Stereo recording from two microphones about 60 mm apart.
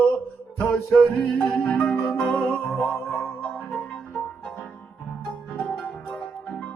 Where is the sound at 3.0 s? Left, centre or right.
Centre.